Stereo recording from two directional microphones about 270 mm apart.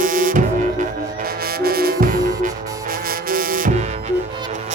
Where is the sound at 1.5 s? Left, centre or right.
Right.